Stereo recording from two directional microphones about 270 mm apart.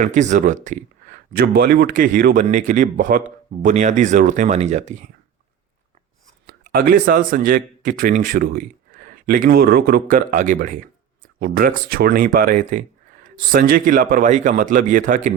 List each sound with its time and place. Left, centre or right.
0.0 s speech: right
6.7 s a man's voice: right